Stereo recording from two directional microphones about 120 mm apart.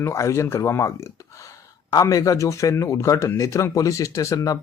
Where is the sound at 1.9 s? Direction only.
30° left (ahead or behind).